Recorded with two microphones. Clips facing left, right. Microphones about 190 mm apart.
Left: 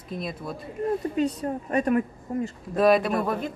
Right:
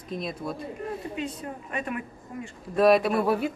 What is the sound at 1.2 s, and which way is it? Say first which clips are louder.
A woman's voice: left 8 dB; 40° left (ahead or behind).